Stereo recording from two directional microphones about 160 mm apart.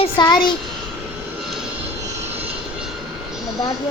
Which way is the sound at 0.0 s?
25° left (ahead or behind).